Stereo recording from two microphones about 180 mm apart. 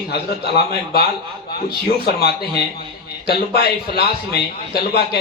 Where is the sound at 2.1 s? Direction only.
60° left (ahead or behind).